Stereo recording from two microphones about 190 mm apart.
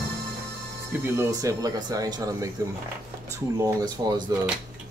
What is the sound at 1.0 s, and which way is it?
Speech, 15° right (ahead or behind).